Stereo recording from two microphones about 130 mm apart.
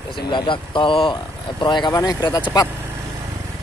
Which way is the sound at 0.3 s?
40° left (ahead or behind).